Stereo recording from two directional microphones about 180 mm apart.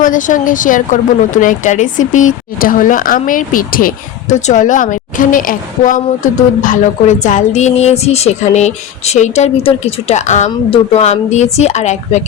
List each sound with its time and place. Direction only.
0.0 s speech: 45° left (ahead or behind)